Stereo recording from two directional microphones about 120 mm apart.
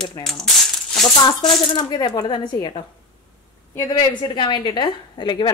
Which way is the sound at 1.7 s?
35° left (ahead or behind).